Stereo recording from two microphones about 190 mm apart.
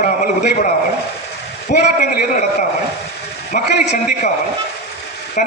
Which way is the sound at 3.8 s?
45° left (ahead or behind).